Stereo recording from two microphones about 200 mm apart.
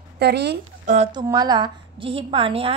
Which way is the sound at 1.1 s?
20° right (ahead or behind).